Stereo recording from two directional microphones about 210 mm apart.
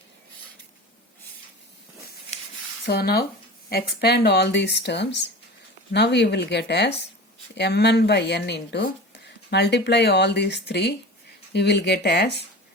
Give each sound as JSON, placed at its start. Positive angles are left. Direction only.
{"t": 2.8, "sound": "speech", "side_deg": 50}